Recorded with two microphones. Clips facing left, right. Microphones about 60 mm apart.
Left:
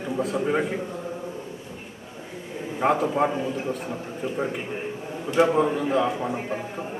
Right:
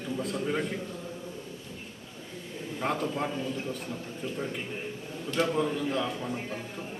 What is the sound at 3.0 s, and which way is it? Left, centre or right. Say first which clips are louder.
A man's voice: left 8 dB; left.